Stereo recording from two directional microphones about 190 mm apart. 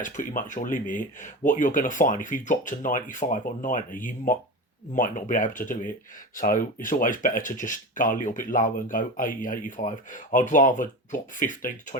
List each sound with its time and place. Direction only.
0.0 s speech: 45° left (ahead or behind)